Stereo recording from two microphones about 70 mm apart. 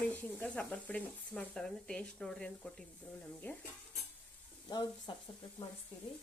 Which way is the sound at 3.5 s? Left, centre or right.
Left.